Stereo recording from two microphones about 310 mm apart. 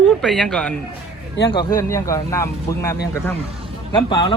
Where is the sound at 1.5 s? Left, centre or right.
Centre.